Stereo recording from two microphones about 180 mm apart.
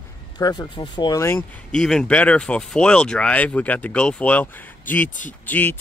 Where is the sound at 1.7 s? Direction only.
5° left (ahead or behind).